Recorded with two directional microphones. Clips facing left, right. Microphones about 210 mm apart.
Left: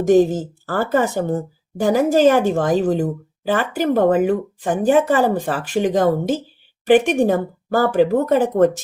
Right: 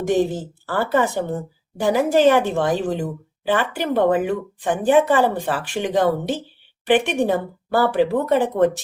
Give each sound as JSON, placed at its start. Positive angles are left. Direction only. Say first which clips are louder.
{"t": 0.1, "sound": "a woman's voice", "louder": "left 6 dB", "side_deg": 45}